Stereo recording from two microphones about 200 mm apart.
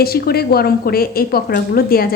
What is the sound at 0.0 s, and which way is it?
Speech, 50° left (ahead or behind).